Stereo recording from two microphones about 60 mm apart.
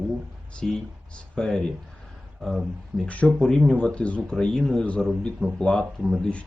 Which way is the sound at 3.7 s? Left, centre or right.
Centre.